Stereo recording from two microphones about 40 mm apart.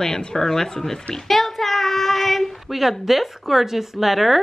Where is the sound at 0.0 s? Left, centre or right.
Centre.